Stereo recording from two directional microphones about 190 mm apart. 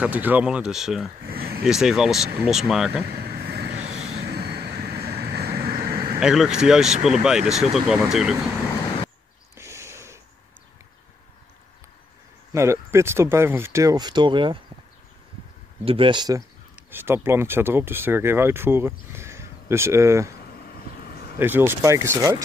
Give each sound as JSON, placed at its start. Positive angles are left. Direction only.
{"t": 0.0, "sound": "speech", "side_deg": -10}
{"t": 1.2, "sound": "a sound", "side_deg": -55}
{"t": 1.6, "sound": "speech", "side_deg": -5}
{"t": 3.1, "sound": "vehicle", "side_deg": -55}
{"t": 3.8, "sound": "vehicle", "side_deg": -35}
{"t": 4.3, "sound": "vehicle", "side_deg": -55}
{"t": 6.1, "sound": "speech", "side_deg": -5}
{"t": 9.6, "sound": "a sound", "side_deg": -15}
{"t": 12.5, "sound": "speech", "side_deg": -15}
{"t": 15.8, "sound": "speech", "side_deg": -30}
{"t": 20.4, "sound": "a sound", "side_deg": 55}
{"t": 21.4, "sound": "speech", "side_deg": -10}